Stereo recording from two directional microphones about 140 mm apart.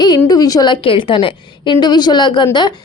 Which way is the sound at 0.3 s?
25° left (ahead or behind).